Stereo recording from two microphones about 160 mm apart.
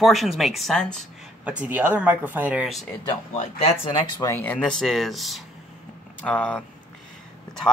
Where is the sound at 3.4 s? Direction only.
40° left (ahead or behind).